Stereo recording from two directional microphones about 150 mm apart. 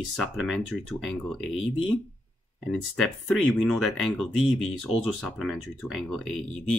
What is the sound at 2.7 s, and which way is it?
Speech, 5° left (ahead or behind).